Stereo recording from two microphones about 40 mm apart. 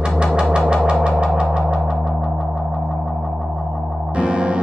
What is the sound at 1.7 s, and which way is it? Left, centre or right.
Music, centre.